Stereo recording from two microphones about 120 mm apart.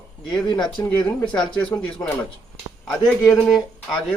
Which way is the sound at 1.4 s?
10° left (ahead or behind).